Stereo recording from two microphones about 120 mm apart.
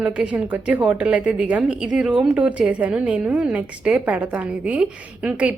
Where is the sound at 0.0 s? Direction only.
10° right (ahead or behind).